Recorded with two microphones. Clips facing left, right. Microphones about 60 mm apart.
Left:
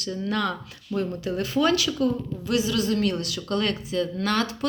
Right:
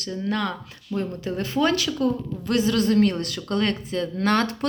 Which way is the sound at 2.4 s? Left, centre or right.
Right.